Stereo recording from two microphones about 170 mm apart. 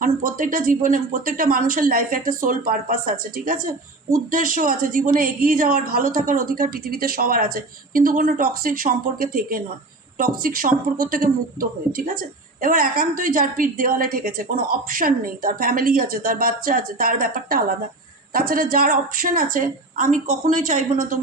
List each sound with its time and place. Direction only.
0.0 s speech: 50° right (ahead or behind)